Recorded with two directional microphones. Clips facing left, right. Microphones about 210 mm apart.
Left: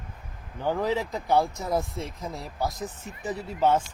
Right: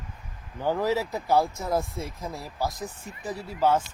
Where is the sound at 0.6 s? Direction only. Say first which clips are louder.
Right 1 dB; 10° right (ahead or behind).